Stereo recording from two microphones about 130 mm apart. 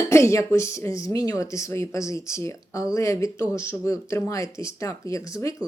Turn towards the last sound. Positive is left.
turn(degrees=25)  # may be behind; listen again after turning